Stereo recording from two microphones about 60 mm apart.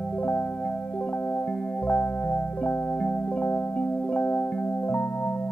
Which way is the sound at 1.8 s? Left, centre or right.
Left.